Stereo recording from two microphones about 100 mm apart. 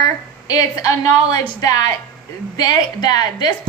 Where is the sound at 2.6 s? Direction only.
45° left (ahead or behind).